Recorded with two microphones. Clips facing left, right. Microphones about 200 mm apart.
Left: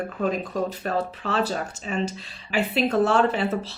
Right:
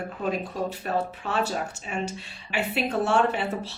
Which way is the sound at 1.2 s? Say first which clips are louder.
Left 2 dB; 90° left.